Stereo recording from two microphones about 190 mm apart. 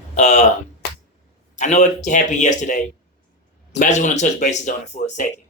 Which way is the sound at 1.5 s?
40° left (ahead or behind).